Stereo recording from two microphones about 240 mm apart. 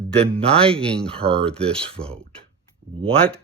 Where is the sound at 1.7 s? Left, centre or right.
Right.